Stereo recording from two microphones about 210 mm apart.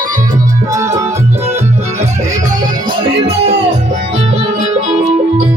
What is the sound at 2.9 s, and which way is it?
Music, 25° right (ahead or behind).